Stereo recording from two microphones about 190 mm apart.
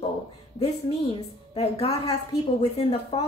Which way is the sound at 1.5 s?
30° left (ahead or behind).